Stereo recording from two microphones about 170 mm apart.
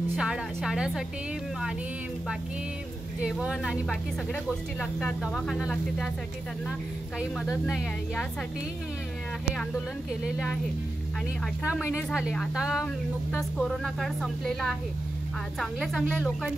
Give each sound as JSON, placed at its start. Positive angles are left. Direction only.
{"t": 0.1, "sound": "speech", "side_deg": -5}
{"t": 3.2, "sound": "speech", "side_deg": -5}
{"t": 7.2, "sound": "speech", "side_deg": -5}
{"t": 10.2, "sound": "speech", "side_deg": -5}
{"t": 11.6, "sound": "speech", "side_deg": -5}